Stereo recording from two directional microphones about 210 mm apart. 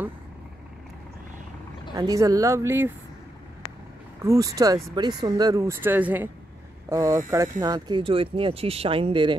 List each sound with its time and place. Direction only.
2.0 s speech: 15° right (ahead or behind)
4.2 s speech: 15° right (ahead or behind)